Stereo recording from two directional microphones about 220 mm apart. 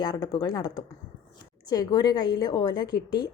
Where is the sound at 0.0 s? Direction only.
20° left (ahead or behind).